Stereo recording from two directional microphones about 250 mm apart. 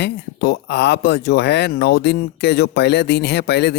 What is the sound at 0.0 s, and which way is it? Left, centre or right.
Speech, left.